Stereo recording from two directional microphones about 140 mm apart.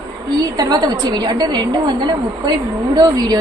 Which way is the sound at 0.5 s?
30° right (ahead or behind).